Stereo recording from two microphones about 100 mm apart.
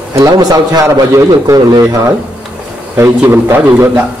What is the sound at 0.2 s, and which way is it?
A man's voice, 40° right (ahead or behind).